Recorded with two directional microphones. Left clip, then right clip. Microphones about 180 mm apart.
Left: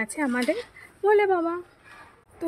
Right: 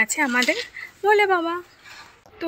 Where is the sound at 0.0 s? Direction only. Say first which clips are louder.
Right 7 dB; 15° left (ahead or behind).